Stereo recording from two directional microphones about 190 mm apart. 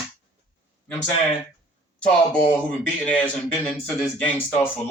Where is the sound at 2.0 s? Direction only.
5° left (ahead or behind).